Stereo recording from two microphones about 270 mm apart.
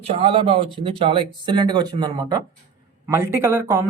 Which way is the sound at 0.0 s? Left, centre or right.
Centre.